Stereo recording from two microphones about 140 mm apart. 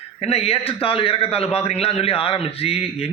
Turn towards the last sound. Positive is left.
turn(degrees=45)  # may be behind; listen again after turning